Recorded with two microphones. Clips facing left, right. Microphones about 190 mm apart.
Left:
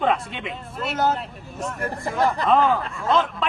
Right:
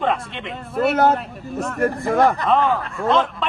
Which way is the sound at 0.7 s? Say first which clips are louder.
Right 7 dB; 65° right (ahead or behind).